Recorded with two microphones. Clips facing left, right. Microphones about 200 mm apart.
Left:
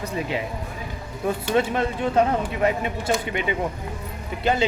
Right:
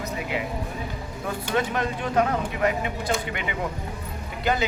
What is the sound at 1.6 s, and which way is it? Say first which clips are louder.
Speech: left 2 dB; 25° left (ahead or behind).